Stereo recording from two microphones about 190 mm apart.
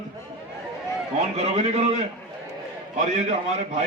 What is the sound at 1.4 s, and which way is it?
A man's voice, 35° right (ahead or behind).